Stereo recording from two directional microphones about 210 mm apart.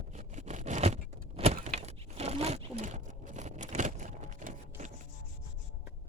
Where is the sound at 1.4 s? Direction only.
30° right (ahead or behind).